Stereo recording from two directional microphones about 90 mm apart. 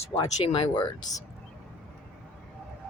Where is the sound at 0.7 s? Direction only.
45° left (ahead or behind).